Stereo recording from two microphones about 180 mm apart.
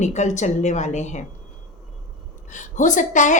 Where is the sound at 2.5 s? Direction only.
45° left (ahead or behind).